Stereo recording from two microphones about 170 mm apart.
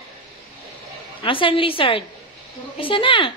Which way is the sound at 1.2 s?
30° left (ahead or behind).